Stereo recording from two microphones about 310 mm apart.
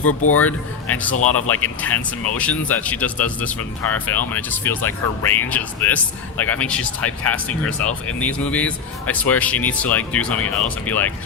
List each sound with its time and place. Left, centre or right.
0.0 s speech: left
0.4 s speech: centre